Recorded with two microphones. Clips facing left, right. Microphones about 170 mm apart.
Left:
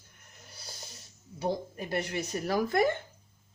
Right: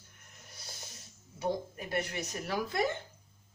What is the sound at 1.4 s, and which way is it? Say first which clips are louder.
Speech: left 2 dB; 30° left (ahead or behind).